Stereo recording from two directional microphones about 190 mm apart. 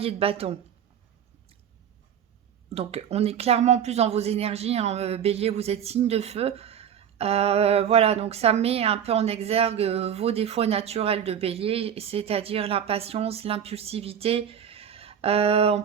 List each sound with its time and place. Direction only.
0.0 s speech: 30° right (ahead or behind)
2.6 s speech: 30° right (ahead or behind)